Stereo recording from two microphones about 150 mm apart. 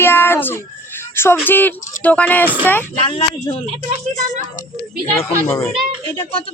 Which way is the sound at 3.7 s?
45° right (ahead or behind).